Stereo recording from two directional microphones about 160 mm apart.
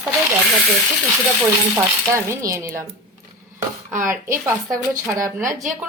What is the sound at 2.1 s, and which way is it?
Speech, 20° right (ahead or behind).